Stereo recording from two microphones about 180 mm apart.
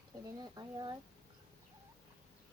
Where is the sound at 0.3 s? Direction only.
20° right (ahead or behind).